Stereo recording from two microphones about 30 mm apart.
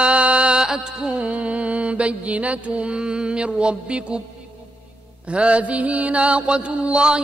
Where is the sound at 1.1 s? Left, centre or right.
Right.